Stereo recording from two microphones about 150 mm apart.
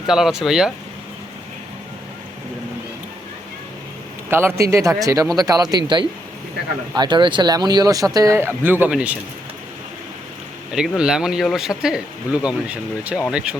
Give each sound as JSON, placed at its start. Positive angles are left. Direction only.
{"t": 0.1, "sound": "speech", "side_deg": -5}
{"t": 4.3, "sound": "speech", "side_deg": -15}
{"t": 10.7, "sound": "speech", "side_deg": -5}